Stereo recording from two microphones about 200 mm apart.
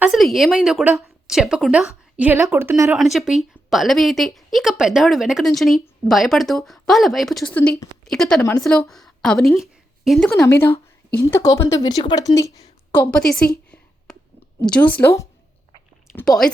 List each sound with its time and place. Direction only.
0.0 s a woman's voice: centre (ahead or behind)
3.0 s a woman's voice: centre (ahead or behind)
10.4 s a woman's voice: 15° left (ahead or behind)
14.1 s clicking: centre (ahead or behind)
14.6 s a woman's voice: 5° left (ahead or behind)